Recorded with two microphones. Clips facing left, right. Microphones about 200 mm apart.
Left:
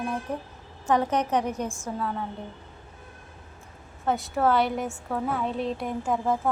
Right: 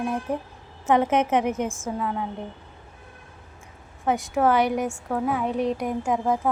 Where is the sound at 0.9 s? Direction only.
20° right (ahead or behind).